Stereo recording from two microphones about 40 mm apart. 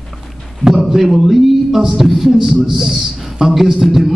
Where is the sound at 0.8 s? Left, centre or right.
Centre.